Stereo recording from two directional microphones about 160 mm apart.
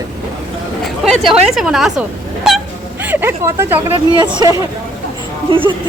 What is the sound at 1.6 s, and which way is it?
Speech, centre (ahead or behind).